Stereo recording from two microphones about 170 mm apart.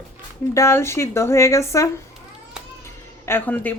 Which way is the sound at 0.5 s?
15° left (ahead or behind).